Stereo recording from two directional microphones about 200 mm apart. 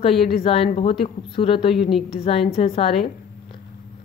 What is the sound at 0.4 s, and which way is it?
A woman's voice, 30° left (ahead or behind).